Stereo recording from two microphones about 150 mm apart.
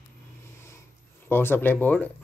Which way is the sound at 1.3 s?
15° left (ahead or behind).